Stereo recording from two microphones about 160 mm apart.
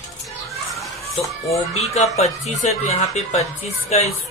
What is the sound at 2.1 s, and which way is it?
Speech, 40° left (ahead or behind).